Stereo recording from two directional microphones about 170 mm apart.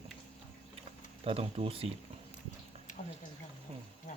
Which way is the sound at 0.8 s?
35° right (ahead or behind).